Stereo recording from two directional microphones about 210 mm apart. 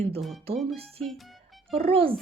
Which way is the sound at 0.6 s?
30° right (ahead or behind).